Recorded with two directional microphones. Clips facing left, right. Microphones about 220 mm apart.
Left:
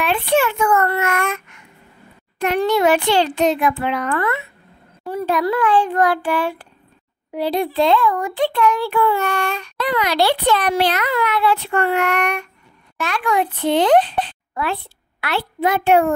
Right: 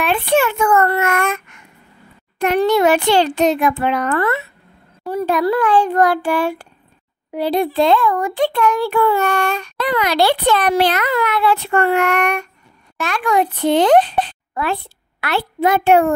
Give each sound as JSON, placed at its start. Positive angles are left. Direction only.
{"t": 0.0, "sound": "a child's voice", "side_deg": -50}